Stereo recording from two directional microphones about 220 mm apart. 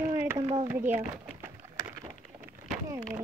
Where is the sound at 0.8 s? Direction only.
10° right (ahead or behind).